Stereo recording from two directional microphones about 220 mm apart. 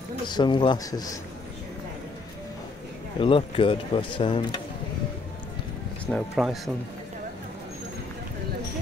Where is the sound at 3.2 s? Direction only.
25° left (ahead or behind).